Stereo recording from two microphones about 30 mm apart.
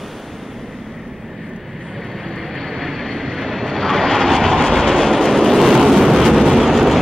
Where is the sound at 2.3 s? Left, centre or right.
Centre.